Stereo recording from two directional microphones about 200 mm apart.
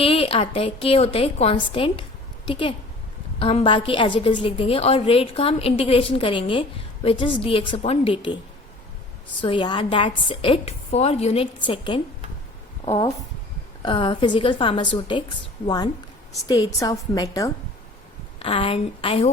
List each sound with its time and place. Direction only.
0.0 s a woman's voice: 30° left (ahead or behind)
9.4 s a woman's voice: 25° left (ahead or behind)
18.3 s a woman's voice: 25° left (ahead or behind)